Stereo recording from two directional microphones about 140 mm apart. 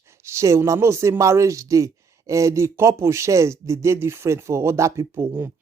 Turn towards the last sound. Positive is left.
turn(degrees=-15)  # may be behind; listen again after turning